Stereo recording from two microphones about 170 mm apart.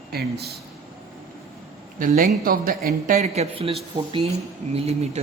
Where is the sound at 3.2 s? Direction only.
35° right (ahead or behind).